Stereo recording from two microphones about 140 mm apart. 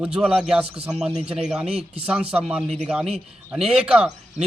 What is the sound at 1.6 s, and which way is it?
Speech, 45° right (ahead or behind).